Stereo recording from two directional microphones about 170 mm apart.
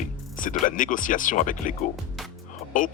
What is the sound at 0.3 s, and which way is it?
A man's voice, 50° left (ahead or behind).